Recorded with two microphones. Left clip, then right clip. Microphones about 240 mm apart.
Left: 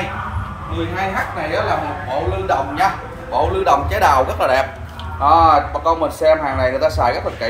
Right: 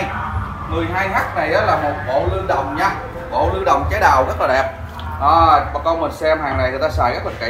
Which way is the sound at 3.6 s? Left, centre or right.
Left.